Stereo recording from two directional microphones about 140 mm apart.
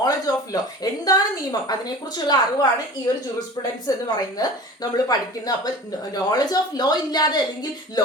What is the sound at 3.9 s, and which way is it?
A woman's voice, 25° left (ahead or behind).